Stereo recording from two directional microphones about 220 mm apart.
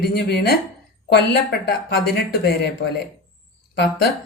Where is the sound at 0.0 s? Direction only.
45° left (ahead or behind).